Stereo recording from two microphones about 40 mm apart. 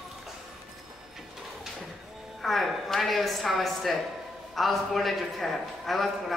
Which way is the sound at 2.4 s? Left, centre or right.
Centre.